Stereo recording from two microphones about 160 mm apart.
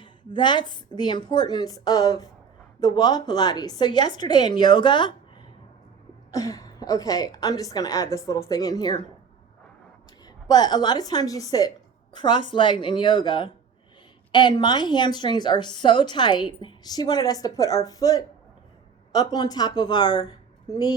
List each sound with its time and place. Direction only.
0.0 s a woman's voice: 30° left (ahead or behind)
6.3 s a woman's voice: 20° left (ahead or behind)
10.2 s a woman's voice: 25° left (ahead or behind)